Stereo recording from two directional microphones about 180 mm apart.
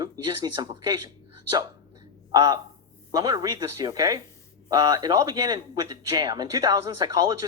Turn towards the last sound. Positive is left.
turn(degrees=-20)  # may be behind; listen again after turning